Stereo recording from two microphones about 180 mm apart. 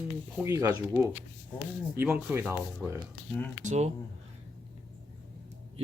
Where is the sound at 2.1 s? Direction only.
10° right (ahead or behind).